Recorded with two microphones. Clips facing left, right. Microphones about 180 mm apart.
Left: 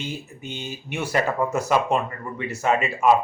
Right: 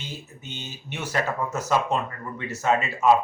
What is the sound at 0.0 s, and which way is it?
Speech, 10° left (ahead or behind).